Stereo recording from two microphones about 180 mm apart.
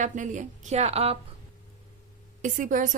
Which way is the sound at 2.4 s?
45° right (ahead or behind).